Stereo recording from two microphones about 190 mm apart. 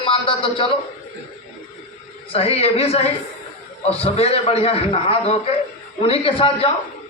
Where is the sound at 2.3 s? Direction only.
30° left (ahead or behind).